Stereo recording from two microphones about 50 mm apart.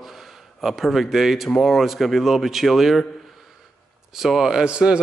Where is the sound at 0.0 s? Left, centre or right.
Centre.